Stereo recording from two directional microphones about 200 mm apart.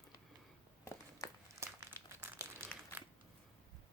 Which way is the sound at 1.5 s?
15° right (ahead or behind).